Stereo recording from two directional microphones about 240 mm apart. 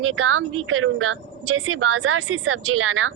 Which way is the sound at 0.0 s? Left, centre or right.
Right.